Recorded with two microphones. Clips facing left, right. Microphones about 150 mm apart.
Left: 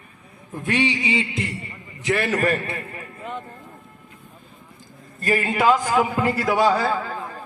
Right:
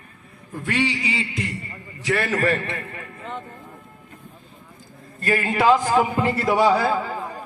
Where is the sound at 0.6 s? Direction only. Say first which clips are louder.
Left 2 dB; 20° left (ahead or behind).